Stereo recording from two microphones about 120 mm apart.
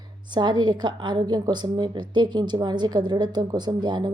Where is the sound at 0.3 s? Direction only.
40° right (ahead or behind).